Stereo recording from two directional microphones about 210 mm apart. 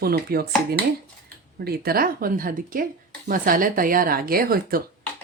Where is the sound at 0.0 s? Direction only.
45° right (ahead or behind).